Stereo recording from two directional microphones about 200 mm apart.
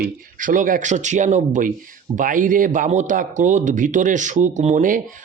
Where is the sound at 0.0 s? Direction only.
40° right (ahead or behind).